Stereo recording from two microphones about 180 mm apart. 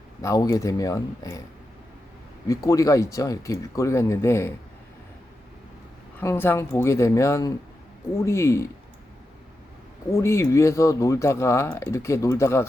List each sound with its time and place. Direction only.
0.2 s speech: 20° left (ahead or behind)
2.5 s speech: 20° left (ahead or behind)
6.1 s speech: 10° left (ahead or behind)
10.2 s speech: 15° left (ahead or behind)